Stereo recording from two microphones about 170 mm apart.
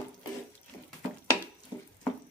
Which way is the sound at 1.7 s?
25° left (ahead or behind).